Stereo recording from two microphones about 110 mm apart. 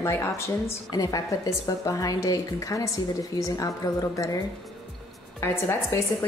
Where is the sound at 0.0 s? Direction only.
25° left (ahead or behind).